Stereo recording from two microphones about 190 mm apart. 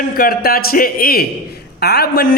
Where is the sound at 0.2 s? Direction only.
50° left (ahead or behind).